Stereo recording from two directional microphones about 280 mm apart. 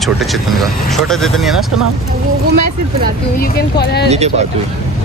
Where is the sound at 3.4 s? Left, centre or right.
Left.